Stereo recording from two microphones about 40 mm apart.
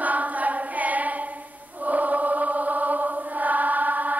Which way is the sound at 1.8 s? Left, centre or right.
Right.